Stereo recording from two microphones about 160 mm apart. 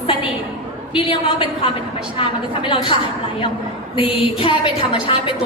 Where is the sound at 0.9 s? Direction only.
35° left (ahead or behind).